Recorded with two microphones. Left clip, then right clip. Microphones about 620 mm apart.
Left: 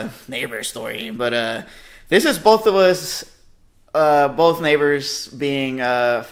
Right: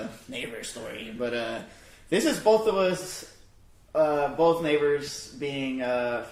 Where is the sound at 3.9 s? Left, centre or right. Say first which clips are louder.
Left 9 dB; left.